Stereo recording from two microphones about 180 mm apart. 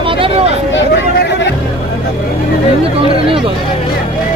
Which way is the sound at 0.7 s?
85° left.